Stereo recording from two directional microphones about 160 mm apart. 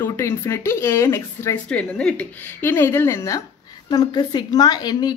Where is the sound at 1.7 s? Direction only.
5° left (ahead or behind); by 5.1 s 25° left (ahead or behind).